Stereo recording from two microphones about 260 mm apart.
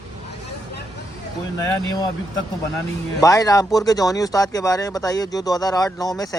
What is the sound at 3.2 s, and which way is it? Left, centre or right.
Speech, centre.